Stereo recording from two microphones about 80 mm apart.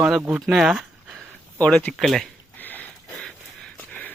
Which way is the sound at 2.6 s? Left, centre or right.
Left.